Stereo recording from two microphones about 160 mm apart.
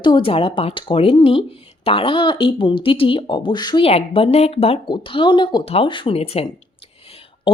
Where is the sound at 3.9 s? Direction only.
35° left (ahead or behind).